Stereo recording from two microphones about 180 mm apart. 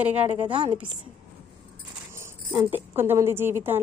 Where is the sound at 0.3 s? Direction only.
30° right (ahead or behind).